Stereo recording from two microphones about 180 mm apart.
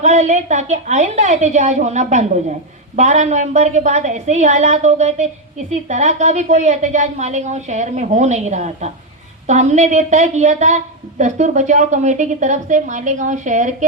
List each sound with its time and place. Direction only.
0.0 s a woman's voice: 40° right (ahead or behind)